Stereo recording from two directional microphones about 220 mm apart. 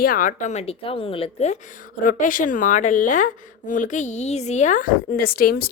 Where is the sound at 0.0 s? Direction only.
40° left (ahead or behind).